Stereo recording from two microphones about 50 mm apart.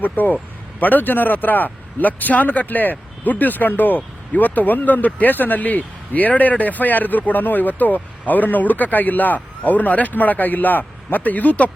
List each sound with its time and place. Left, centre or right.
0.0 s speech: left